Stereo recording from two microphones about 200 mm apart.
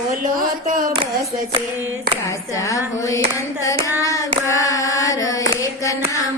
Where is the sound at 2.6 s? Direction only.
15° left (ahead or behind).